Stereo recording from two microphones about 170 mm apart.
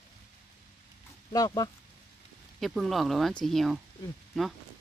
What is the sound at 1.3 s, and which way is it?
Speech, 20° left (ahead or behind).